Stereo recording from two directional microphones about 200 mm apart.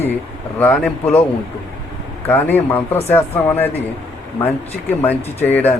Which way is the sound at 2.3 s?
10° left (ahead or behind).